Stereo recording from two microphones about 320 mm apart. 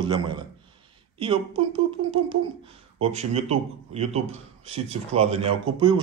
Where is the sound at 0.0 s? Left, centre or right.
Centre.